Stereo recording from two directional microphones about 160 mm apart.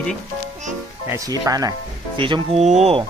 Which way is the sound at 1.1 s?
20° right (ahead or behind).